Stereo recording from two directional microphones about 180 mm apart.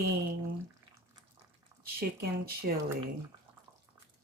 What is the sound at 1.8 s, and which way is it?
Speech, 55° right (ahead or behind).